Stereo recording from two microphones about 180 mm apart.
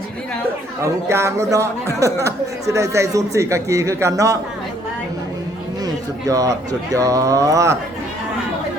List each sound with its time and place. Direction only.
0.8 s speech: 15° right (ahead or behind)
5.8 s speech: 20° right (ahead or behind)